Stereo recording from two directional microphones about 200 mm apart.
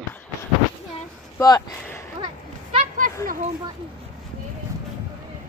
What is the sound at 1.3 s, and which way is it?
Speech, 15° left (ahead or behind).